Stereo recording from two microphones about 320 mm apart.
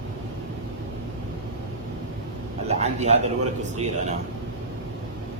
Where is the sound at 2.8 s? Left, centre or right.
Right.